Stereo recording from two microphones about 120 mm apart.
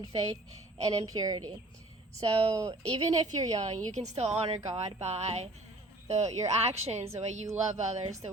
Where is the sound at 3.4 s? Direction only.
35° right (ahead or behind).